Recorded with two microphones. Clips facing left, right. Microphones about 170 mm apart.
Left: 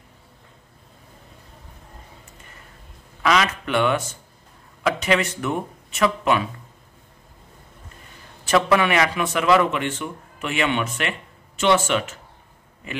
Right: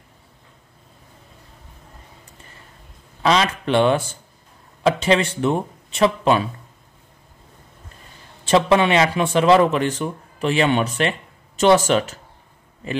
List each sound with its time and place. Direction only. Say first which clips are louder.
3.2 s speech: right 2 dB; 30° right (ahead or behind)
8.5 s speech: right 3 dB; 25° right (ahead or behind)